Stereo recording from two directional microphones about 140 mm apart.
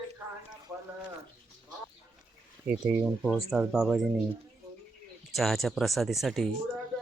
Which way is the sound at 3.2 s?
Centre (ahead or behind).